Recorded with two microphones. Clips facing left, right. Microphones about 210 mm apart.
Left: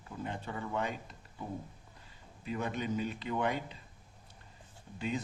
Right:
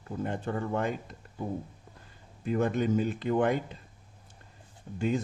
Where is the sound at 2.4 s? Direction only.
50° right (ahead or behind).